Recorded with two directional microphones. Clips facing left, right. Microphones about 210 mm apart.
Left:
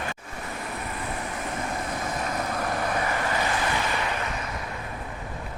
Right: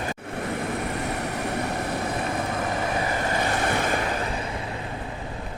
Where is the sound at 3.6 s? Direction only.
50° right (ahead or behind).